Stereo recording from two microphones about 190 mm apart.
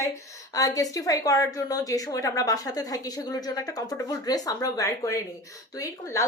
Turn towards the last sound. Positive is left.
turn(degrees=15)  # may be behind; listen again after turning